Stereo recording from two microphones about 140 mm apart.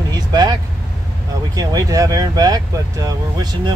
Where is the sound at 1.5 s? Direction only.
25° right (ahead or behind).